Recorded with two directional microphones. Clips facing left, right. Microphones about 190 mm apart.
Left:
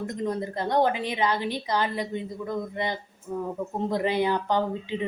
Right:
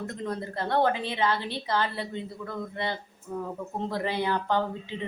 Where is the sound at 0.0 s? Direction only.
15° left (ahead or behind).